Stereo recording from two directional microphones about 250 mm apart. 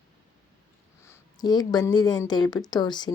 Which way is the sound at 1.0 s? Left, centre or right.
Centre.